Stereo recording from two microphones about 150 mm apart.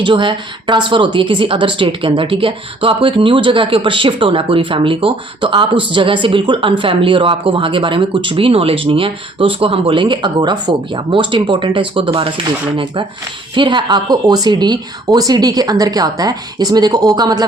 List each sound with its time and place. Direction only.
0.0 s a woman's voice: 35° right (ahead or behind)